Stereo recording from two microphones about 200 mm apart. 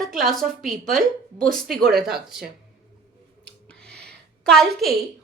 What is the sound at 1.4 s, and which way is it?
Speech, 45° right (ahead or behind).